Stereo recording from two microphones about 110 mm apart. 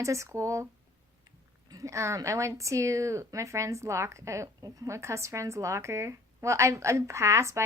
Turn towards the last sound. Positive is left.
turn(degrees=-25)  # may be behind; listen again after turning